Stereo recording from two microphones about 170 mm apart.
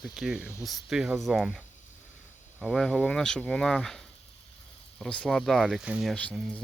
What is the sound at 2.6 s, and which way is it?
Speech, centre (ahead or behind).